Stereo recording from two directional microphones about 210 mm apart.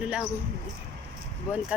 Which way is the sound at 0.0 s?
5° right (ahead or behind).